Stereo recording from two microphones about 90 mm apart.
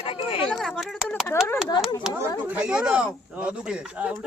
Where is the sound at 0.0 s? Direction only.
85° left.